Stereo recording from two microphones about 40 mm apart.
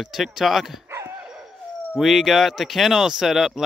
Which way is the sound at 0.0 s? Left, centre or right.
Centre.